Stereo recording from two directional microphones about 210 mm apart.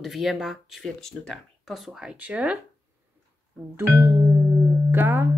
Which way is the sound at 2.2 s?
5° right (ahead or behind).